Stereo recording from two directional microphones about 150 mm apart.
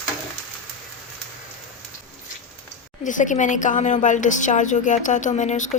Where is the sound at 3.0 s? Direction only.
55° left (ahead or behind).